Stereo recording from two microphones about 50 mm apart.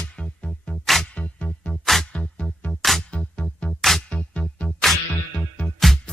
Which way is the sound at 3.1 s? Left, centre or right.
Left.